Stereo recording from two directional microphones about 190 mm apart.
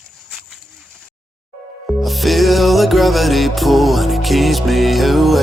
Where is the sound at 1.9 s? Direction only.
Centre (ahead or behind).